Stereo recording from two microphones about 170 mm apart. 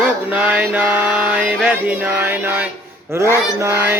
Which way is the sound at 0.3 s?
10° right (ahead or behind).